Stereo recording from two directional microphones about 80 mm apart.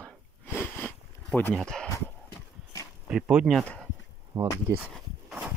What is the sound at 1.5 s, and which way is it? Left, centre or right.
Speech, centre.